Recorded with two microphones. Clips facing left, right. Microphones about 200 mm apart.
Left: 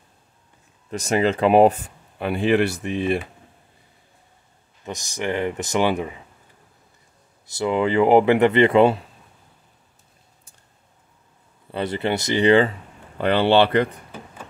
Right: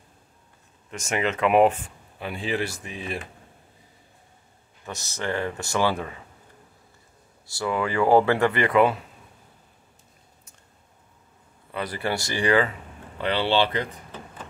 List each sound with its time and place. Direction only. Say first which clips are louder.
0.9 s speech: left 6 dB; 35° left (ahead or behind)
2.1 s speech: left 9 dB; 60° left (ahead or behind)
4.8 s speech: left 4 dB; 15° left (ahead or behind)
7.4 s speech: left 5 dB; 20° left (ahead or behind)
11.7 s speech: left 5 dB; 25° left (ahead or behind)
13.2 s speech: left 6 dB; 50° left (ahead or behind)